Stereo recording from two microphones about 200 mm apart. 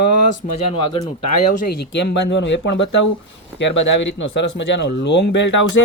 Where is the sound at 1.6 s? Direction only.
55° left (ahead or behind).